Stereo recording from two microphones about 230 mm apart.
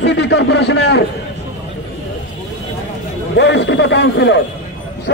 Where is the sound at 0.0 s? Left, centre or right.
Left.